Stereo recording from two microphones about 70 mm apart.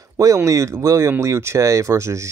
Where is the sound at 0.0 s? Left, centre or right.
Right.